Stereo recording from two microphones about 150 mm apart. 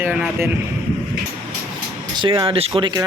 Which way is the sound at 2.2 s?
35° right (ahead or behind).